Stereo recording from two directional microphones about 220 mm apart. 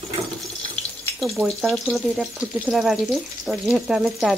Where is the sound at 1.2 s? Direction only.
Centre (ahead or behind).